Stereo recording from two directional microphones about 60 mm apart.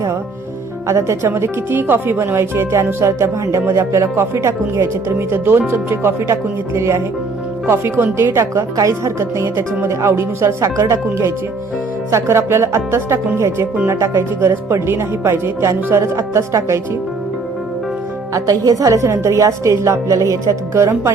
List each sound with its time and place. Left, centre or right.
0.9 s speech: right
8.7 s speech: right
18.3 s a woman's voice: right